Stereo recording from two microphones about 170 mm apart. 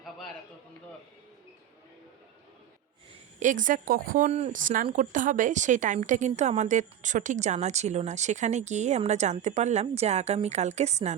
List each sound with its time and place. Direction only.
3.4 s speech: 50° right (ahead or behind)